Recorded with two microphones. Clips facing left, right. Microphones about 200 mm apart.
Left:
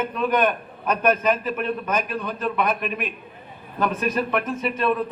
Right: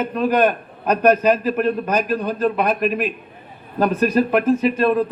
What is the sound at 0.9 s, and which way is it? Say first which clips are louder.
A man's voice: right 5 dB; 35° right (ahead or behind).